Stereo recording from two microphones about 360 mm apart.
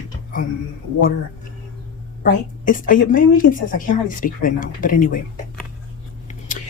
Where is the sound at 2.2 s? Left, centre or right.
Left.